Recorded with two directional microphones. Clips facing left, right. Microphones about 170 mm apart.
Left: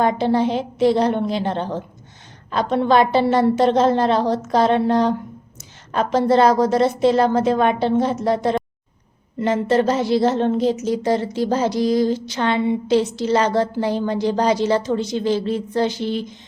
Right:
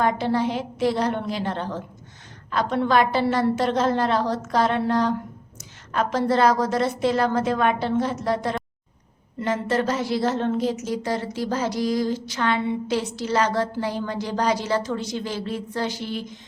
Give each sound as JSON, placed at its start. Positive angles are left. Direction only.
{"t": 0.0, "sound": "speech", "side_deg": 25}